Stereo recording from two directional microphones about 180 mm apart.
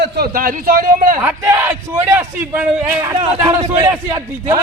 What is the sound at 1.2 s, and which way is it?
A man's voice, 10° right (ahead or behind).